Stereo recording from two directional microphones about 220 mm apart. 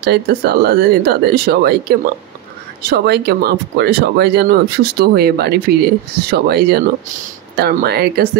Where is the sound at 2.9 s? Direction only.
45° right (ahead or behind).